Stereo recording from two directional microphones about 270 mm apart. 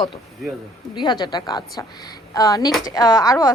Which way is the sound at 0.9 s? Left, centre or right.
Centre.